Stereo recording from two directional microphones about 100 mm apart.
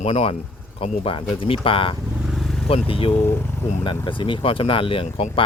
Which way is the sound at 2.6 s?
70° left (ahead or behind).